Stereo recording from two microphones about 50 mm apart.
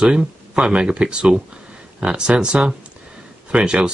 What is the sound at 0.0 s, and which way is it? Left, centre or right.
Speech, centre.